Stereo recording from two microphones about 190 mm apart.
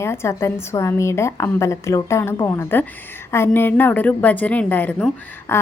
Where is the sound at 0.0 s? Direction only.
15° left (ahead or behind).